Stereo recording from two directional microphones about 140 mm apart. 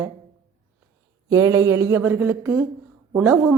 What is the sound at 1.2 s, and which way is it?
A woman's voice, 20° right (ahead or behind).